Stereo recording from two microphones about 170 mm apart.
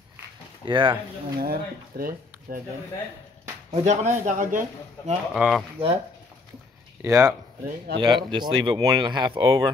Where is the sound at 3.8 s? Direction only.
45° right (ahead or behind).